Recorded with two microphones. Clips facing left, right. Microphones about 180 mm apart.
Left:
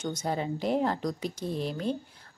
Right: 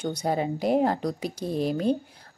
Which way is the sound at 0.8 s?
40° right (ahead or behind).